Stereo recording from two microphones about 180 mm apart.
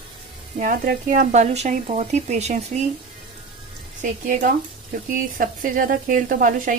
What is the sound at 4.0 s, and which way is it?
Speech, 45° right (ahead or behind).